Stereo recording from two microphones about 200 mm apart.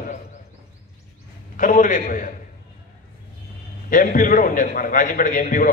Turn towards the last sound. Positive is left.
turn(degrees=45)  # may be behind; listen again after turning